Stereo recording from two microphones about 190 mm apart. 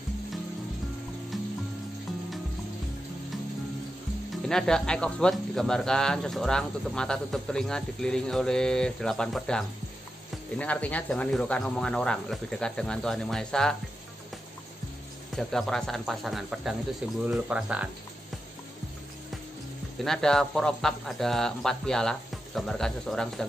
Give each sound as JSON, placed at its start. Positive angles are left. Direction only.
{"t": 1.3, "sound": "music", "side_deg": 0}
{"t": 4.5, "sound": "speech", "side_deg": 5}
{"t": 15.3, "sound": "speech", "side_deg": 0}
{"t": 20.0, "sound": "speech", "side_deg": 5}